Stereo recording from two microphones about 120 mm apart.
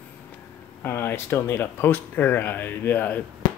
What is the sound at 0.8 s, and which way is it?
Speech, 20° left (ahead or behind).